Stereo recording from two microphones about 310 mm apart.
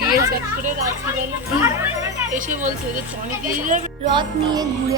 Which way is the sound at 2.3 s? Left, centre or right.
Right.